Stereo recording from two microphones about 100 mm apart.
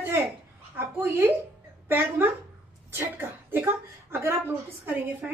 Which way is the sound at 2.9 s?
20° right (ahead or behind).